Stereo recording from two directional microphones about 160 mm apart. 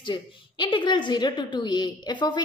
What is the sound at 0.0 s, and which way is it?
A woman's voice, 30° left (ahead or behind).